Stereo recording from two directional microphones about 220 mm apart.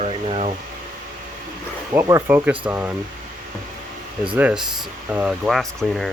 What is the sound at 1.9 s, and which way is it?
Speech, 15° right (ahead or behind).